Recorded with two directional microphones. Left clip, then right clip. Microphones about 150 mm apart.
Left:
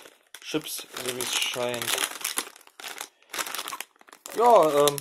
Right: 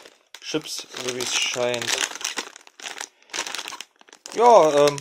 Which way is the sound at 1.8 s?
5° right (ahead or behind).